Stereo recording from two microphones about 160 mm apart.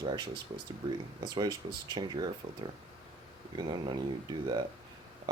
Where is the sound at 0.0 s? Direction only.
30° right (ahead or behind).